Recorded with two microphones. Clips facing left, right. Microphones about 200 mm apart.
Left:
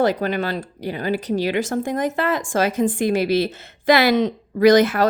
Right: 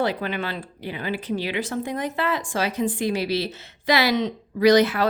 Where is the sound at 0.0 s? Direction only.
45° left (ahead or behind).